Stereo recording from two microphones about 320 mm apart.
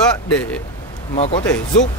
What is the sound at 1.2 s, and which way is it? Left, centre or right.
Speech, centre.